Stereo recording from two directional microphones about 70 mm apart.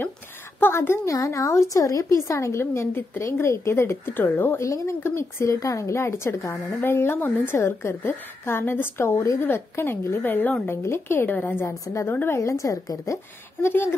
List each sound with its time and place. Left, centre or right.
0.6 s speech: left
1.1 s a woman's voice: left
4.6 s a woman's voice: left
10.7 s speech: left
11.6 s a woman's voice: left
12.1 s speech: left
12.4 s a woman's voice: left
13.6 s speech: left